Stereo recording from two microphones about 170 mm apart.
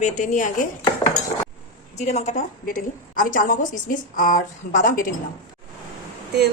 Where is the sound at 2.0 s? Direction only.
45° left (ahead or behind).